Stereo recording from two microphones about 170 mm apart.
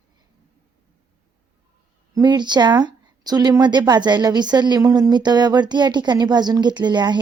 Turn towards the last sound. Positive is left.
turn(degrees=-25)  # may be behind; listen again after turning